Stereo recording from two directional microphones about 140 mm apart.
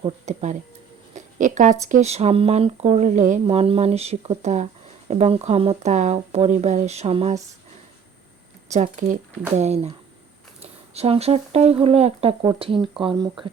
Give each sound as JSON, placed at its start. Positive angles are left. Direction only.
{"t": 0.3, "sound": "speech", "side_deg": -55}
{"t": 3.4, "sound": "speech", "side_deg": -45}
{"t": 8.7, "sound": "speech", "side_deg": -60}